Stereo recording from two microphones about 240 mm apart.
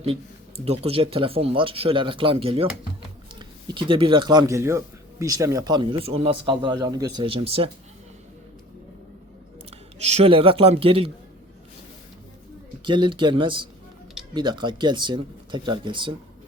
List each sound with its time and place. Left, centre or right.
0.6 s a man's voice: right
9.6 s speech: right
12.8 s a man's voice: centre